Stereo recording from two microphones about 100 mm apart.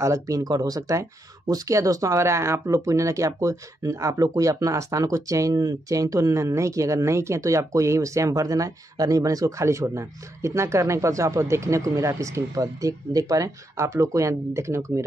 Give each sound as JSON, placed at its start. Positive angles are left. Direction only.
{"t": 0.0, "sound": "speech", "side_deg": -30}